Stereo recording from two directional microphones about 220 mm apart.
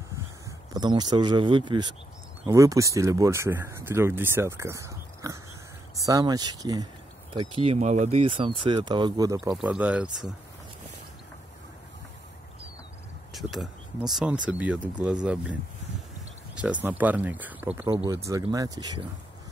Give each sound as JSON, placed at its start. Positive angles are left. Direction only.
{"t": 0.5, "sound": "speech", "side_deg": -20}
{"t": 9.6, "sound": "speech", "side_deg": -5}
{"t": 13.3, "sound": "speech", "side_deg": 0}
{"t": 16.8, "sound": "speech", "side_deg": -5}